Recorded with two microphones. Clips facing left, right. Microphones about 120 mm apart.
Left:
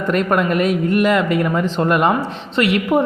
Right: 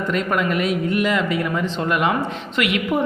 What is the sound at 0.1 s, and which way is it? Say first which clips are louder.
A woman's voice: left 5 dB; 50° left (ahead or behind).